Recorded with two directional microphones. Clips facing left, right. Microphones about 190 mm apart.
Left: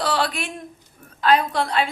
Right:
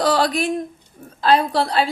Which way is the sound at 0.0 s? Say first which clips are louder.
Right 6 dB; 40° right (ahead or behind).